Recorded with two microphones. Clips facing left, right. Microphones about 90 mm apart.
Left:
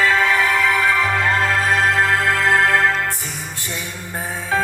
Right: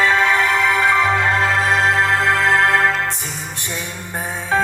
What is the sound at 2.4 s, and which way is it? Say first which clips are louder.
Music: left 1 dB; 20° right (ahead or behind).